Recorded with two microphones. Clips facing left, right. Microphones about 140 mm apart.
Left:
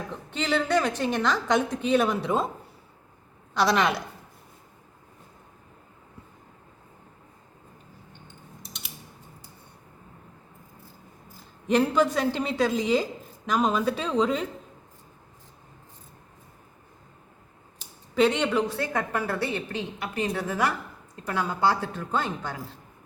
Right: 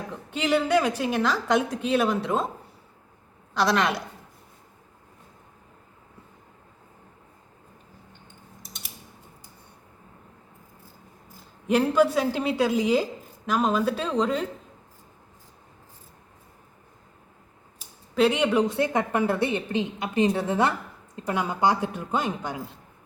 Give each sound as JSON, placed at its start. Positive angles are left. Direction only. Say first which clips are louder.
{"t": 0.3, "sound": "a woman's voice", "louder": "right 3 dB", "side_deg": -10}
{"t": 3.5, "sound": "a woman's voice", "louder": "even", "side_deg": 0}
{"t": 11.7, "sound": "a woman's voice", "louder": "right 2 dB", "side_deg": -5}
{"t": 18.1, "sound": "a woman's voice", "louder": "right 1 dB", "side_deg": -5}
{"t": 18.7, "sound": "a woman's voice", "louder": "right 4 dB", "side_deg": -20}